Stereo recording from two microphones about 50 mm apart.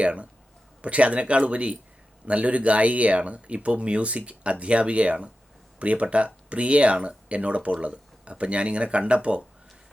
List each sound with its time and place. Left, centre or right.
0.0 s speech: right